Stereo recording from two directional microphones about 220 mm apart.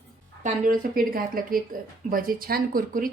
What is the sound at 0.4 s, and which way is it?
Speech, 40° right (ahead or behind).